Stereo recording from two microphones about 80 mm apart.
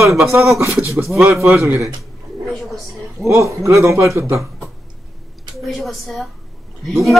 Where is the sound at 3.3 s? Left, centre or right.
Right.